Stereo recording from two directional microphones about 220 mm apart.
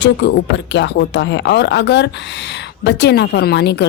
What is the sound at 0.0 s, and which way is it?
Speech, 50° left (ahead or behind).